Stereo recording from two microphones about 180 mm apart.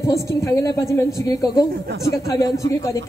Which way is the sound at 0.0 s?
15° left (ahead or behind).